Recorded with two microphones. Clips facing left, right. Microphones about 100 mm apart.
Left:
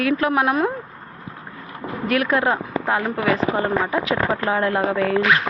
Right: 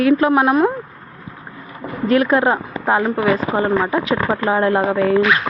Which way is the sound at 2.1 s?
30° right (ahead or behind).